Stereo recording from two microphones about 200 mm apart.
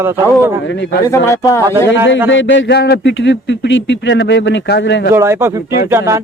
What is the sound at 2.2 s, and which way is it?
Speech, 65° left (ahead or behind).